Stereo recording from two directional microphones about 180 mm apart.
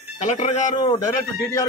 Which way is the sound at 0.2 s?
40° left (ahead or behind).